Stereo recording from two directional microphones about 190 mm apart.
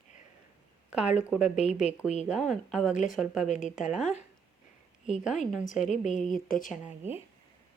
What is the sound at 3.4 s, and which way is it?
Speech, 40° left (ahead or behind).